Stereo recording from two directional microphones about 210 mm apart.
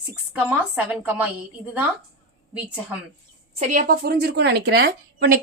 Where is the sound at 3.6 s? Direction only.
35° right (ahead or behind).